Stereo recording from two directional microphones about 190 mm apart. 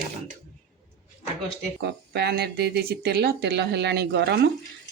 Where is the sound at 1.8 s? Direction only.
60° right (ahead or behind).